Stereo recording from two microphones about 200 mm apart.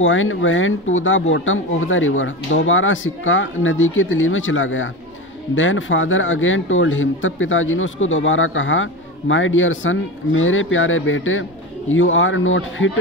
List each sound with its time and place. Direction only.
0.0 s speech: 75° left (ahead or behind)